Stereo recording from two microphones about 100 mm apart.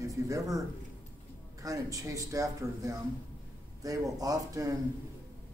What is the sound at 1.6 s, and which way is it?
A man's voice, 35° right (ahead or behind).